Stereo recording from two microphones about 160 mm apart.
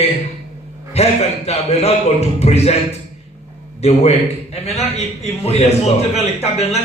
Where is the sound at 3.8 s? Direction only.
40° left (ahead or behind).